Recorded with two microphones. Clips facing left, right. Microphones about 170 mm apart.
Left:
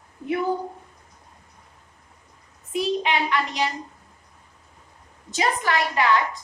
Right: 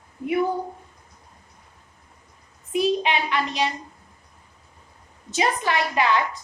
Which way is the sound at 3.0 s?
20° right (ahead or behind).